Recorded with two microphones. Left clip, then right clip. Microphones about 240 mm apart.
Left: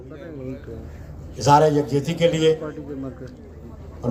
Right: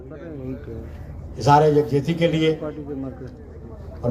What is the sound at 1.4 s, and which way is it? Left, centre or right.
A man's voice, left.